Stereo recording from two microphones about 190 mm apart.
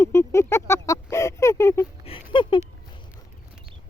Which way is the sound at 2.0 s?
25° left (ahead or behind).